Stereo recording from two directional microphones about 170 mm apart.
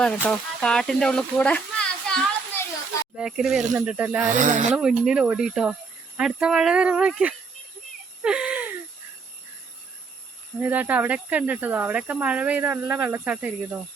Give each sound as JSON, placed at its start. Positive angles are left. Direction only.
{"t": 0.0, "sound": "speech", "side_deg": 5}
{"t": 4.4, "sound": "speech", "side_deg": -45}
{"t": 4.7, "sound": "speech", "side_deg": -5}
{"t": 8.2, "sound": "a sound", "side_deg": -5}
{"t": 10.6, "sound": "speech", "side_deg": -10}